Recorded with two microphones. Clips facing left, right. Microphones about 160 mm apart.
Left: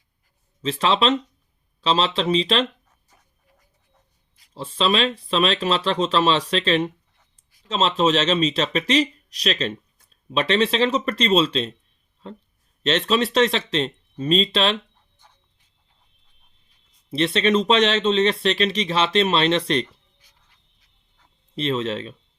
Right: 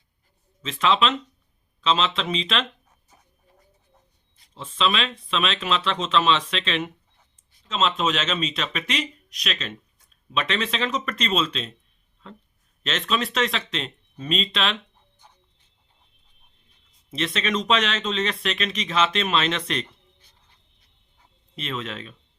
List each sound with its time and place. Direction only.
0.6 s speech: 35° left (ahead or behind)
4.5 s speech: 35° left (ahead or behind)
17.1 s speech: 35° left (ahead or behind)
21.5 s speech: 35° left (ahead or behind)